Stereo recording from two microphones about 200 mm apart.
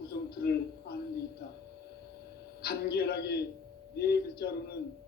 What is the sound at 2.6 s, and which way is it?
A man's voice, 50° left (ahead or behind).